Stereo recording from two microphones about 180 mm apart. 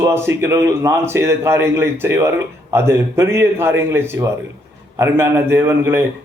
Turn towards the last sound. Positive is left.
turn(degrees=-15)  # may be behind; listen again after turning